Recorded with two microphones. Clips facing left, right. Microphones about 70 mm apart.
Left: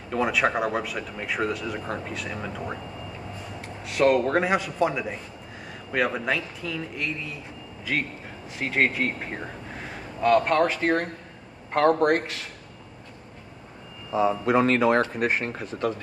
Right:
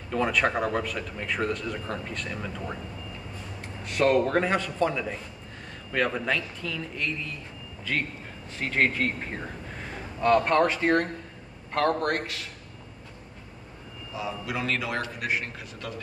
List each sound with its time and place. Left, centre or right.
0.1 s speech: centre
8.5 s speech: centre
11.7 s a man's voice: left
14.1 s a man's voice: left